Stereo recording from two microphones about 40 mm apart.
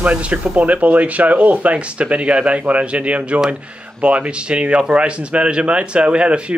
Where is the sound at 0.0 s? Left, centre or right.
Right.